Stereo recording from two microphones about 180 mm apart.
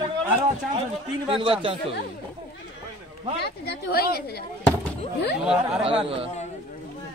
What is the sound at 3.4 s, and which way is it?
A woman's voice, 65° left (ahead or behind).